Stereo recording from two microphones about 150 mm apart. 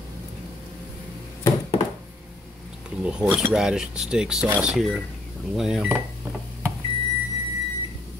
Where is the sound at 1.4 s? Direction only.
30° left (ahead or behind).